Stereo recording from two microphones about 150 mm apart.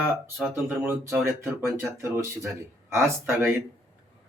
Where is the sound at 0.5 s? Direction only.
15° right (ahead or behind).